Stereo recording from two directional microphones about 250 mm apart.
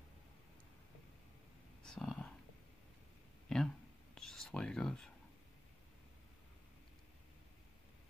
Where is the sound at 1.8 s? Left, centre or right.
Centre.